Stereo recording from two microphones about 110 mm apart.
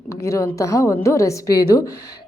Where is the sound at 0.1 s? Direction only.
30° left (ahead or behind).